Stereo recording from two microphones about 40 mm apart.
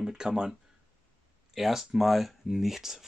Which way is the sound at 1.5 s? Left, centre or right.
Centre.